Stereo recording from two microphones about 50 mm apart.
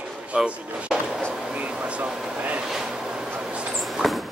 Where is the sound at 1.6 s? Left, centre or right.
Right.